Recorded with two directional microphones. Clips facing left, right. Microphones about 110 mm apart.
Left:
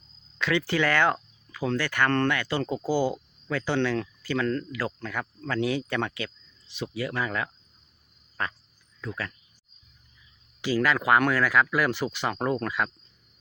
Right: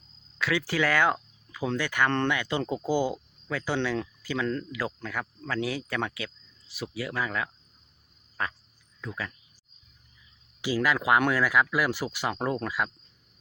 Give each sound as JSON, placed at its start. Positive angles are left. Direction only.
{"t": 0.3, "sound": "speech", "side_deg": -5}
{"t": 8.4, "sound": "frog", "side_deg": -5}
{"t": 9.0, "sound": "speech", "side_deg": -10}
{"t": 10.6, "sound": "speech", "side_deg": -10}